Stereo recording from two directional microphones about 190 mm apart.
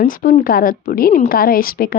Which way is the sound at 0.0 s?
50° left (ahead or behind).